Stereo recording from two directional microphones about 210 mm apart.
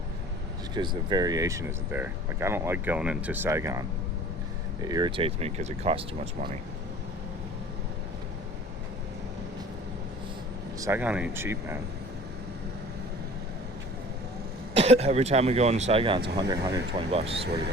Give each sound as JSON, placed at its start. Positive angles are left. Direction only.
{"t": 0.7, "sound": "speech", "side_deg": -20}
{"t": 10.8, "sound": "speech", "side_deg": -10}
{"t": 14.8, "sound": "speech", "side_deg": -30}